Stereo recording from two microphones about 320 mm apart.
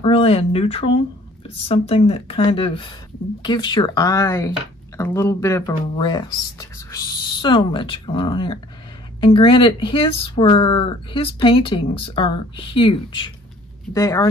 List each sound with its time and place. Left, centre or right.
0.0 s speech: centre